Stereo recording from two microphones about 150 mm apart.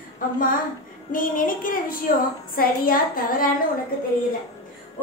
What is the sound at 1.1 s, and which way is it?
A woman's voice, 65° left (ahead or behind).